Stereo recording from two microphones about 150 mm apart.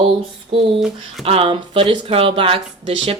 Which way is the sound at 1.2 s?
40° right (ahead or behind).